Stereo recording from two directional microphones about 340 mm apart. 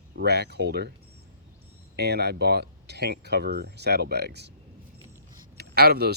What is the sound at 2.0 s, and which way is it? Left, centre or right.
Speech, right.